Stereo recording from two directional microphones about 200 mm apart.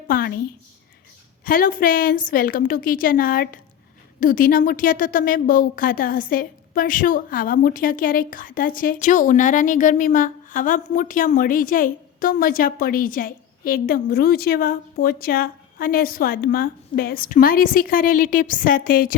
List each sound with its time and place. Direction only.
0.1 s a woman's voice: 50° left (ahead or behind)
1.5 s a woman's voice: 45° left (ahead or behind)